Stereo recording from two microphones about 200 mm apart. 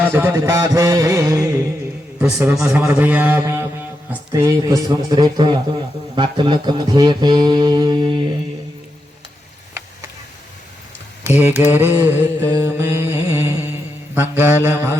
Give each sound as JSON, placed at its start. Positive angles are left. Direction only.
{"t": 0.0, "sound": "music", "side_deg": -10}
{"t": 6.1, "sound": "mantra", "side_deg": -25}
{"t": 11.2, "sound": "mantra", "side_deg": -10}
{"t": 14.2, "sound": "music", "side_deg": -10}